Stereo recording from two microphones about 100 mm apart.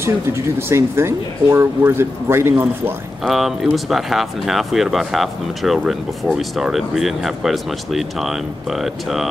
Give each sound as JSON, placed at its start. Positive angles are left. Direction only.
{"t": 0.0, "sound": "speech", "side_deg": -25}
{"t": 3.3, "sound": "speech", "side_deg": 0}